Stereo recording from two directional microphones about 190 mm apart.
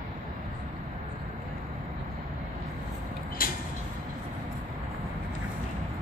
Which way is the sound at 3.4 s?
50° left (ahead or behind).